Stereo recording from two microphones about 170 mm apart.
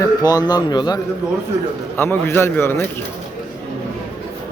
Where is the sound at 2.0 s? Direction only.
10° left (ahead or behind).